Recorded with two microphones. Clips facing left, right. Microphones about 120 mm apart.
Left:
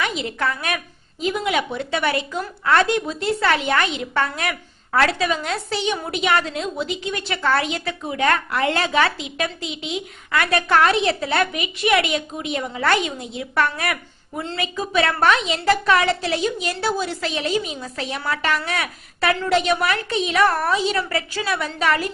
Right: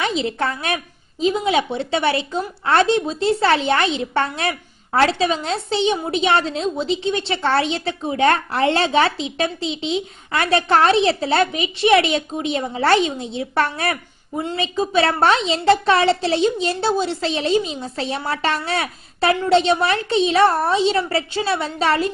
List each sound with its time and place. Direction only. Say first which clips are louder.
0.0 s a woman's voice: right 3 dB; 30° right (ahead or behind)